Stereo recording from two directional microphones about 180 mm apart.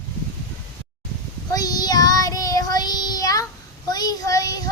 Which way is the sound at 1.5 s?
20° left (ahead or behind).